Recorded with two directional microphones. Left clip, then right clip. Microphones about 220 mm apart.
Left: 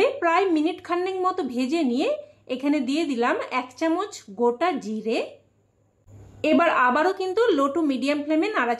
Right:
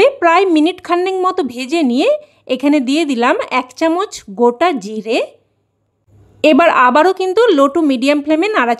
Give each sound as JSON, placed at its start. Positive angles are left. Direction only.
{"t": 0.0, "sound": "a woman's voice", "side_deg": -50}
{"t": 6.4, "sound": "a woman's voice", "side_deg": -45}